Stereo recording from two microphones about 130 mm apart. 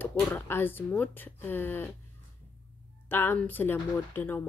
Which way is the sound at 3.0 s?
15° left (ahead or behind).